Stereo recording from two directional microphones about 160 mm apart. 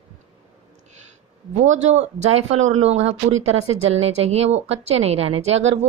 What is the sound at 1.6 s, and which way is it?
Speech, 45° right (ahead or behind).